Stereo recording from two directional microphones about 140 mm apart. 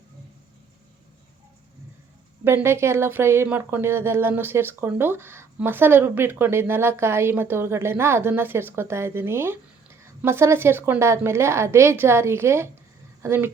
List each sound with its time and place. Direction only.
2.4 s a woman's voice: 15° right (ahead or behind)